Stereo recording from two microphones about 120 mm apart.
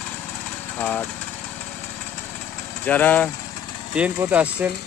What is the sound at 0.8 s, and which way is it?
Speech, 15° left (ahead or behind).